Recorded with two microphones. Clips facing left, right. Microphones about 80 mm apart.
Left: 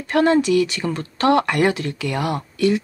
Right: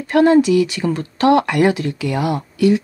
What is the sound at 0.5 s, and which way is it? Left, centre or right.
Speech, left.